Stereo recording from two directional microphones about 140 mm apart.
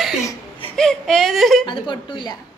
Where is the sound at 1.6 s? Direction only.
35° left (ahead or behind).